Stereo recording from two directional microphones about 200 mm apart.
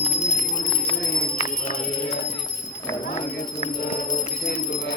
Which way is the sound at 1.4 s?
45° left (ahead or behind).